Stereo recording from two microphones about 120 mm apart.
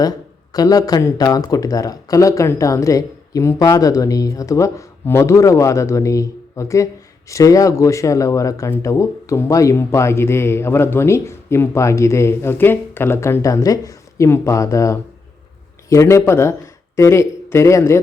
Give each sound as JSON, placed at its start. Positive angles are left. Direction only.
{"t": 0.0, "sound": "speech", "side_deg": 30}